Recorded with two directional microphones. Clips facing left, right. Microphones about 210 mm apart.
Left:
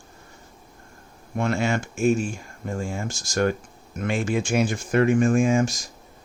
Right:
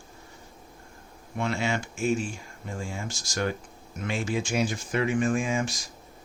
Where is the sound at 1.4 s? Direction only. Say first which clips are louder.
Left 5 dB; 50° left (ahead or behind).